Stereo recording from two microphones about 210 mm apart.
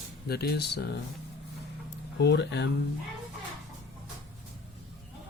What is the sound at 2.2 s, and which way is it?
Speech, 55° left (ahead or behind).